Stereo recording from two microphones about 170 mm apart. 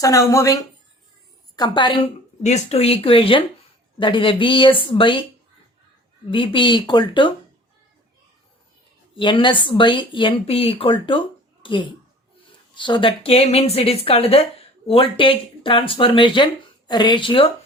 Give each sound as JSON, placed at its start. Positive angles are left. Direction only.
{"t": 0.0, "sound": "speech", "side_deg": 20}
{"t": 6.3, "sound": "speech", "side_deg": 30}
{"t": 9.1, "sound": "speech", "side_deg": 30}